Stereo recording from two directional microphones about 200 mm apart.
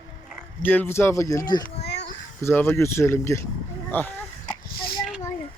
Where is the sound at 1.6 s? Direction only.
55° left (ahead or behind).